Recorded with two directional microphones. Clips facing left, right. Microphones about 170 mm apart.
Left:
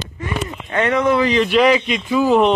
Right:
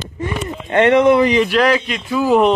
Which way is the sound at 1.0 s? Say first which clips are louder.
Right 4 dB; 15° right (ahead or behind).